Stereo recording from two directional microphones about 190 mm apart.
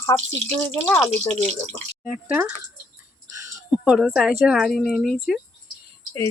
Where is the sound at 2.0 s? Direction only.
5° right (ahead or behind).